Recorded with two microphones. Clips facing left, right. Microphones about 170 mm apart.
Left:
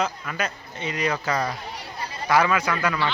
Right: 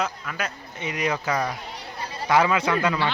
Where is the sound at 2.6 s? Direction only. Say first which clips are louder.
Right 2 dB; 25° right (ahead or behind).